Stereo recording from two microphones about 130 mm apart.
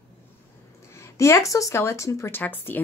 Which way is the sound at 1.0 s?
20° left (ahead or behind).